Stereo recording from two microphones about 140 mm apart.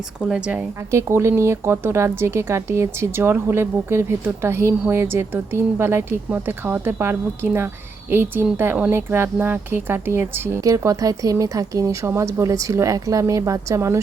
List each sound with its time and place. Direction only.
0.2 s speech: 5° right (ahead or behind)
0.9 s speech: 20° right (ahead or behind)